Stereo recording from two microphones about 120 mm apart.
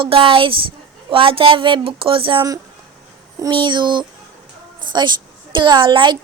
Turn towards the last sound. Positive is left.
turn(degrees=-40)  # may be behind; listen again after turning